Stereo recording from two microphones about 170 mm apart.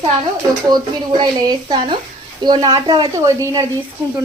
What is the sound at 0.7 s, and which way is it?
Speech, 25° right (ahead or behind).